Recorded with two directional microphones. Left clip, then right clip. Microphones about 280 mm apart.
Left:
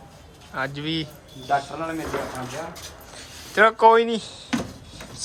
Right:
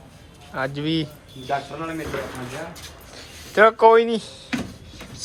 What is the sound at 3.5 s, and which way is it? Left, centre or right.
Speech, centre.